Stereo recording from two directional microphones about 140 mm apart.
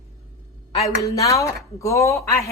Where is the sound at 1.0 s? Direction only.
25° left (ahead or behind).